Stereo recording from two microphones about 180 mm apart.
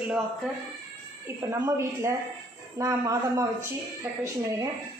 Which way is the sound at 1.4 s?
15° right (ahead or behind).